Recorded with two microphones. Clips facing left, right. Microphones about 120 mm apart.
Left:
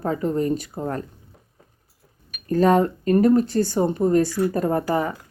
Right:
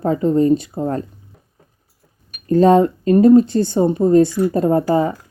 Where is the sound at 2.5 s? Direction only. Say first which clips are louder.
Right 6 dB; 25° right (ahead or behind).